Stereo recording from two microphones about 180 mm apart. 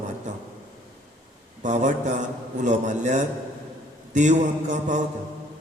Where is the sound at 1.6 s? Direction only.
40° right (ahead or behind).